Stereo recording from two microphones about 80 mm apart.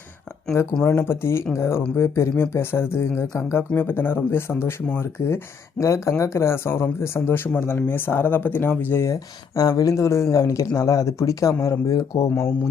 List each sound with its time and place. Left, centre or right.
0.8 s speech: left
9.0 s speech: left